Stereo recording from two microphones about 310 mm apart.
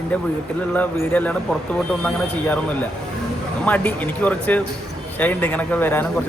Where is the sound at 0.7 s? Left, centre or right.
Centre.